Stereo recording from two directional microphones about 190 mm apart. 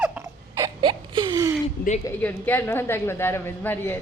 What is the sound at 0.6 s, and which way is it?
Wail, 25° right (ahead or behind).